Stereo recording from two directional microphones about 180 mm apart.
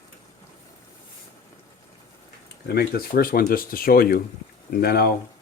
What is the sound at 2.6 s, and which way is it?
Speech, 60° left (ahead or behind).